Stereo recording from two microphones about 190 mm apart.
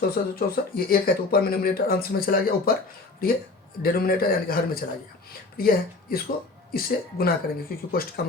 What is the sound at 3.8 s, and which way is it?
Speech, 50° left (ahead or behind).